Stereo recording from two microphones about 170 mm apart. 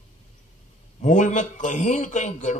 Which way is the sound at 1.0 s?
45° left (ahead or behind).